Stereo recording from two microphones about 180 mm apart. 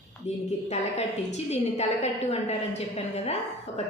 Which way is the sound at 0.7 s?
35° left (ahead or behind).